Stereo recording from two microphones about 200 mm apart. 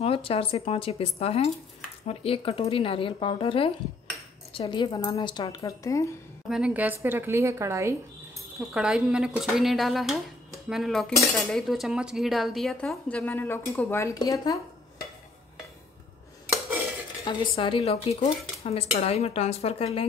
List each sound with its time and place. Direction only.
0.0 s speech: 30° left (ahead or behind)
6.5 s a woman's voice: 5° right (ahead or behind)
8.5 s speech: 5° right (ahead or behind); by 14.6 s 15° left (ahead or behind)
17.2 s speech: 25° left (ahead or behind)